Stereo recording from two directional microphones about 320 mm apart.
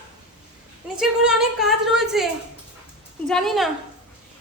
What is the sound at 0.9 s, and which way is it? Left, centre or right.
A woman's voice, centre.